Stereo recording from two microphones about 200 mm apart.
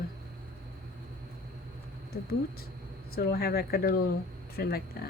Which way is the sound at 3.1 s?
50° left (ahead or behind).